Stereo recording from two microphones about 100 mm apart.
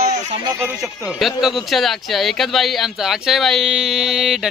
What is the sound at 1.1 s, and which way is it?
Speech, centre (ahead or behind).